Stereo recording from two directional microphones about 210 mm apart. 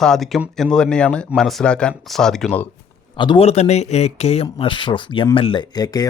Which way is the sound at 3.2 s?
25° left (ahead or behind).